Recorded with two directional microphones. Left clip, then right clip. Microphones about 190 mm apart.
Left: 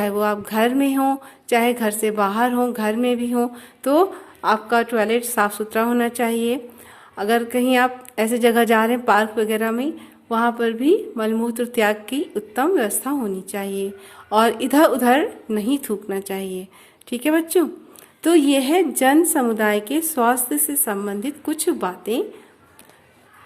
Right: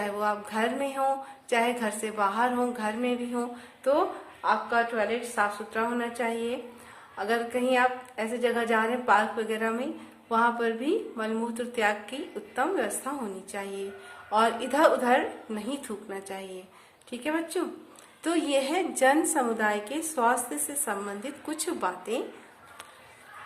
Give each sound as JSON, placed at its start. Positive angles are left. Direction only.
{"t": 0.0, "sound": "a woman's voice", "side_deg": 45}